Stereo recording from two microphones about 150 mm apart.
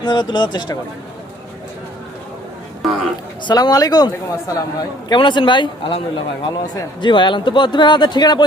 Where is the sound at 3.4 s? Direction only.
25° left (ahead or behind).